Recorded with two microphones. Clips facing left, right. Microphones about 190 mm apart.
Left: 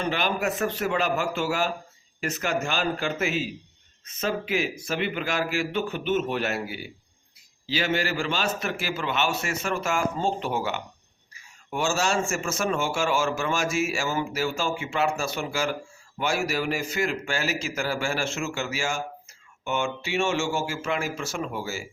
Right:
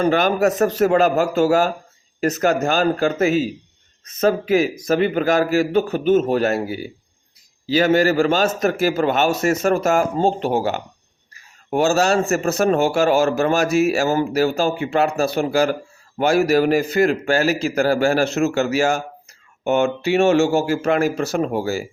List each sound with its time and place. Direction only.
0.0 s a man's voice: 45° right (ahead or behind)
16.1 s a man's voice: 55° right (ahead or behind)
17.0 s a man's voice: 40° right (ahead or behind)
20.6 s a man's voice: 40° right (ahead or behind)
20.8 s a man's voice: 60° right (ahead or behind)
21.2 s a man's voice: 40° right (ahead or behind)